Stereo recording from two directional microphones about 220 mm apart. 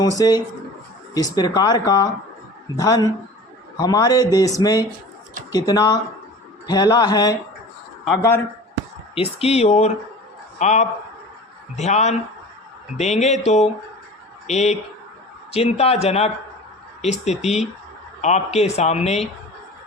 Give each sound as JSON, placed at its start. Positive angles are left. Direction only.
{"t": 0.2, "sound": "speech", "side_deg": 20}
{"t": 9.1, "sound": "speech", "side_deg": 25}